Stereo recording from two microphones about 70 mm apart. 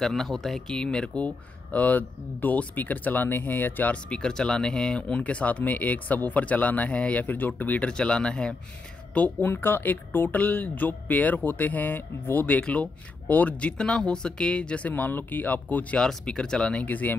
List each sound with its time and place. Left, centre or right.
0.0 s speech: centre; by 7.9 s left
7.9 s speech: centre
9.1 s speech: left
16.0 s speech: centre